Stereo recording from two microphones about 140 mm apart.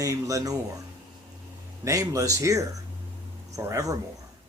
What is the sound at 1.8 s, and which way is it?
Speech, 20° right (ahead or behind).